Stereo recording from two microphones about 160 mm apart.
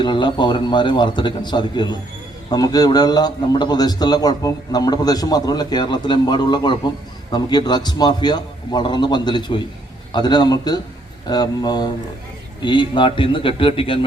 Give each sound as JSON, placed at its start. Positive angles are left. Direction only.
{"t": 0.0, "sound": "a man's voice", "side_deg": 30}